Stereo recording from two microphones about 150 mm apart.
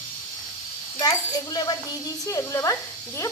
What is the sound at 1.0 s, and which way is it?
Speech, 25° left (ahead or behind).